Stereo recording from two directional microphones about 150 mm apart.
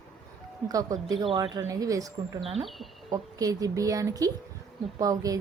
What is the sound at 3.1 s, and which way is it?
A woman's voice, 25° right (ahead or behind).